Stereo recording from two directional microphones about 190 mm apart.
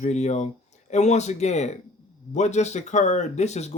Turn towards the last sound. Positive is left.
turn(degrees=35)  # may be behind; listen again after turning